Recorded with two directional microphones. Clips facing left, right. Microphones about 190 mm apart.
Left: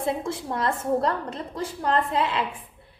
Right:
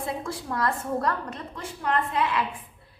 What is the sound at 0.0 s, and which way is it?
A woman's voice, 25° left (ahead or behind).